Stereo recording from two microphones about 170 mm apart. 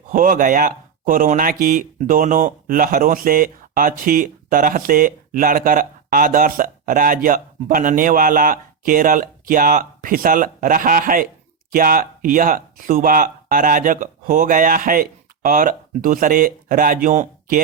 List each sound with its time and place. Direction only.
0.1 s speech: 55° right (ahead or behind)